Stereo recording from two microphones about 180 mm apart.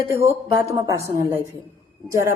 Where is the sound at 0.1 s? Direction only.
15° right (ahead or behind).